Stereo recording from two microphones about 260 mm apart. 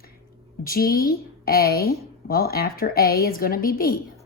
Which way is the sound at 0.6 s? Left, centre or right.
Left.